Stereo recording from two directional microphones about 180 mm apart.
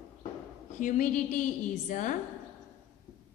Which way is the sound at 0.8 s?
45° left (ahead or behind).